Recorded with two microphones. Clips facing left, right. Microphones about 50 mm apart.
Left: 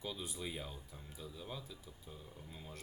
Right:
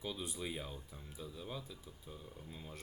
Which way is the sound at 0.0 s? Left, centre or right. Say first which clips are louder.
Right 1 dB; centre.